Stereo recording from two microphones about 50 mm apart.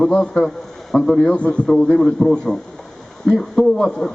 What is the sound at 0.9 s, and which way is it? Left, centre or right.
Speech, centre.